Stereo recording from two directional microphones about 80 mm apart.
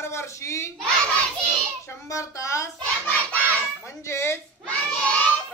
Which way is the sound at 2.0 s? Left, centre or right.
Left.